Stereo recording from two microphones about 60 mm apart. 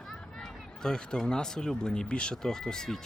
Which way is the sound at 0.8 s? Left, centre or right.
Centre.